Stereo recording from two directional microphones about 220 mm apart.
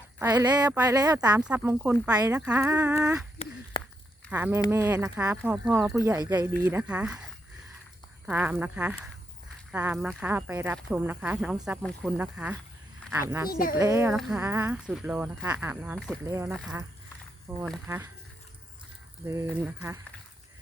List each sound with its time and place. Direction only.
0.2 s speech: 15° right (ahead or behind)
1.5 s speech: 5° right (ahead or behind)
3.3 s a sound: 25° left (ahead or behind)
4.3 s speech: 10° right (ahead or behind)
8.3 s speech: 10° right (ahead or behind)
13.0 s a sound: 5° left (ahead or behind)
13.5 s speech: 40° left (ahead or behind)
13.7 s speech: 10° right (ahead or behind)
16.5 s speech: centre (ahead or behind)
19.5 s speech: 5° right (ahead or behind)